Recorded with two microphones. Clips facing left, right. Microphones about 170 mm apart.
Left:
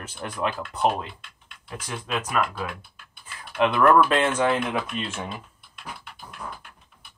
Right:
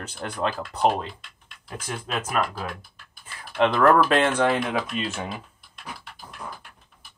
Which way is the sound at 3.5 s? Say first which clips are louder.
Even; 35° right (ahead or behind).